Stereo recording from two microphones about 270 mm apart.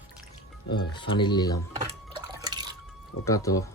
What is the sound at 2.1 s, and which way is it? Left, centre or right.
Drip, centre.